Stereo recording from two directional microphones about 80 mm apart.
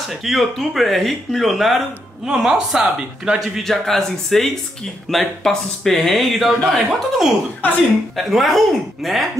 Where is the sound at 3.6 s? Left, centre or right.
Centre.